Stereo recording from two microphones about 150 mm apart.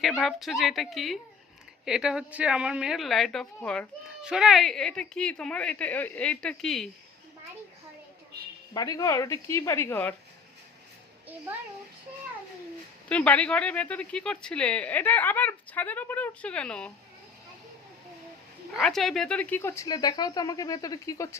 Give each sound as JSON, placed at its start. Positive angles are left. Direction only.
{"t": 0.2, "sound": "speech", "side_deg": 0}
{"t": 8.7, "sound": "speech", "side_deg": 25}
{"t": 13.1, "sound": "speech", "side_deg": 10}
{"t": 18.7, "sound": "speech", "side_deg": 0}